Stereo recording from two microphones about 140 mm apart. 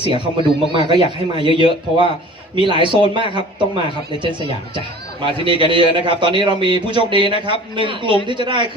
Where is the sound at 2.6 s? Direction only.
40° right (ahead or behind).